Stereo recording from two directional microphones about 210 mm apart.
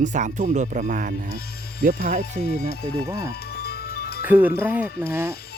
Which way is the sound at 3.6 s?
50° left (ahead or behind).